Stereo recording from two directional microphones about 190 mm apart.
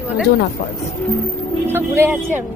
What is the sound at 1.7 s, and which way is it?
Speech, 10° right (ahead or behind).